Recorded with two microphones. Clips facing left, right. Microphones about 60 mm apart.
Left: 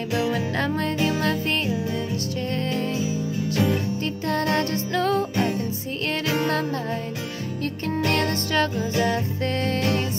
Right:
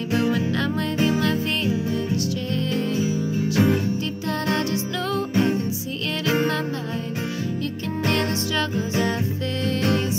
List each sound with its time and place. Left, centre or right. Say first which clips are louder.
2.5 s music: right 1 dB; left
3.5 s music: right 3 dB; right
4.5 s music: even; left
6.2 s music: right 4 dB; right